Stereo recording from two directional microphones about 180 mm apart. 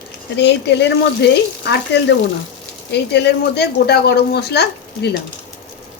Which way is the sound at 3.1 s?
70° left (ahead or behind).